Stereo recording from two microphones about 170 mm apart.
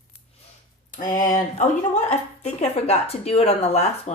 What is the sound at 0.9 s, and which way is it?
Speech, 50° left (ahead or behind).